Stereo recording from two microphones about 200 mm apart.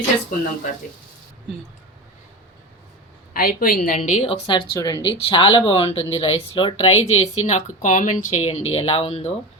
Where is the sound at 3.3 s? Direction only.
45° left (ahead or behind); by 9.3 s 30° left (ahead or behind).